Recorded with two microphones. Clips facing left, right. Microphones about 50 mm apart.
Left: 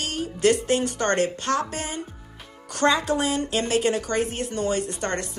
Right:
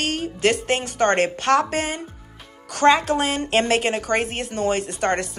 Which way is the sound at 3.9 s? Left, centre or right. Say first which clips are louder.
Right 1 dB; right.